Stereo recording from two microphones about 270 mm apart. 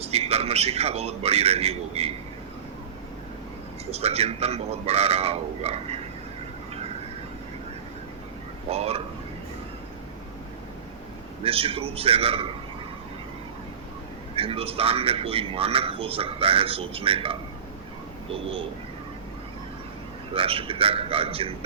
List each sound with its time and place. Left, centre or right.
0.0 s speech: right
3.9 s speech: right
8.7 s speech: right
11.4 s speech: right
14.3 s speech: right
20.3 s speech: right